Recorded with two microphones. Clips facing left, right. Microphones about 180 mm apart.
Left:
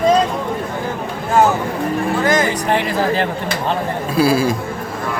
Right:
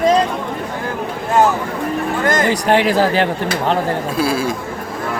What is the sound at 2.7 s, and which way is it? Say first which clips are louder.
Speech: right 4 dB; 90° right.